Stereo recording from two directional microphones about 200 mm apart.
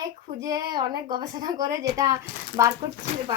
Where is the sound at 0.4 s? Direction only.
20° right (ahead or behind).